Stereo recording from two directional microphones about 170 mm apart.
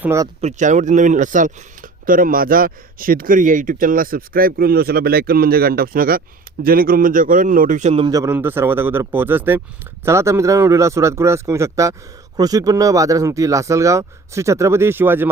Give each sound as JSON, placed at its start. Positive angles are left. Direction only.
{"t": 0.0, "sound": "a man's voice", "side_deg": -15}
{"t": 0.4, "sound": "speech", "side_deg": -45}
{"t": 8.0, "sound": "a man's voice", "side_deg": -20}